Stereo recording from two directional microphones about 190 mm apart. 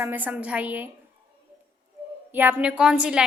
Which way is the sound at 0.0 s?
10° right (ahead or behind).